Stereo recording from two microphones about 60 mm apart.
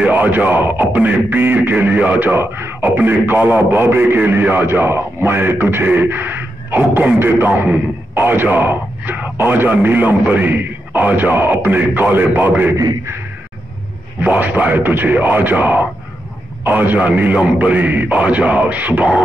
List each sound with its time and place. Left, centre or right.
0.0 s speech: right
14.2 s a man's voice: right